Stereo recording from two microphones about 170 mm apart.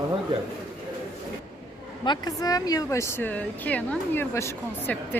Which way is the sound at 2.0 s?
25° left (ahead or behind).